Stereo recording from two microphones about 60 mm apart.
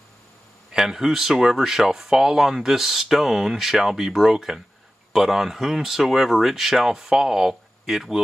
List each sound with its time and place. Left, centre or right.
0.7 s speech: centre